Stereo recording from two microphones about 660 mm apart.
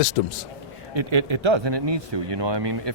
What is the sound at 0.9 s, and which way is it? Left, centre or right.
Speech, right.